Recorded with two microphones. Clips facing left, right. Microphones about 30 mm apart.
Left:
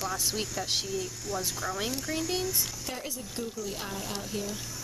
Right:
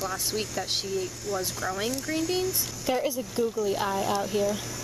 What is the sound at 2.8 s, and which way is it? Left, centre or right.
Speech, centre.